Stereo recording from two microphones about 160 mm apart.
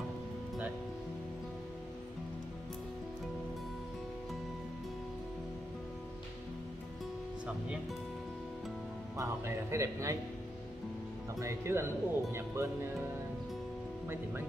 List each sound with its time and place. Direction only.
9.1 s speech: 15° right (ahead or behind)
11.3 s speech: 15° right (ahead or behind)
14.0 s speech: 15° right (ahead or behind)